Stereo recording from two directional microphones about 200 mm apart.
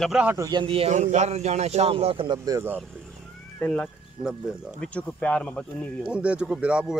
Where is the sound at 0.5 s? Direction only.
25° right (ahead or behind).